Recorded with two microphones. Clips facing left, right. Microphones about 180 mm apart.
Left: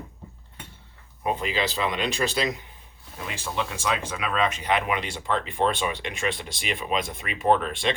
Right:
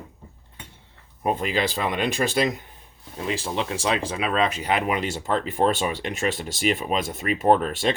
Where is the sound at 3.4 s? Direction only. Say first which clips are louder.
Right 3 dB; 35° right (ahead or behind).